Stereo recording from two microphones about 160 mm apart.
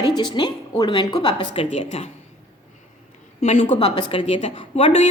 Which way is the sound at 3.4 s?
40° left (ahead or behind).